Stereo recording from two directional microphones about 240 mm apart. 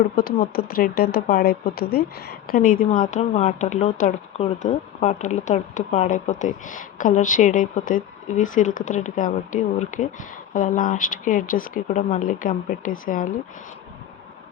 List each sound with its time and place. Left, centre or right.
0.2 s speech: left